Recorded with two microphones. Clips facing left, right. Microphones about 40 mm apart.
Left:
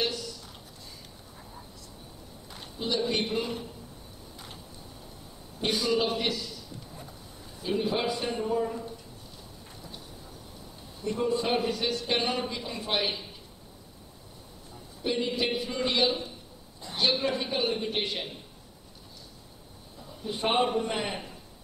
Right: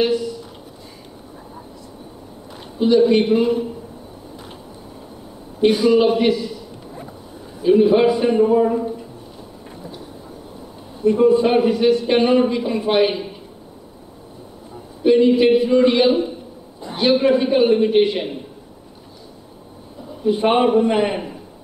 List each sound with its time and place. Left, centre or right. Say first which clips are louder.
0.0 s a sound: right 13 dB; right
2.8 s speech: right 15 dB; centre
5.6 s a man's voice: right 13 dB; right
11.0 s speech: right 15 dB; centre
15.0 s speech: right 16 dB; right
20.1 s a man's voice: right 12 dB; centre